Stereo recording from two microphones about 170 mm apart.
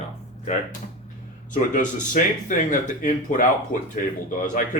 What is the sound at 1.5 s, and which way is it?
Speech, 50° left (ahead or behind).